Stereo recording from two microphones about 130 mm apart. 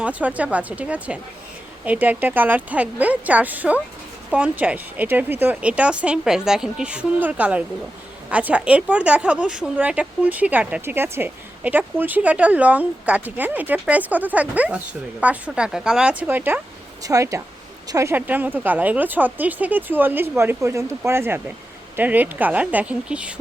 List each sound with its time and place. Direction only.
0.0 s a woman's voice: 10° right (ahead or behind)
17.0 s speech: 25° right (ahead or behind)
18.1 s a woman's voice: 15° right (ahead or behind)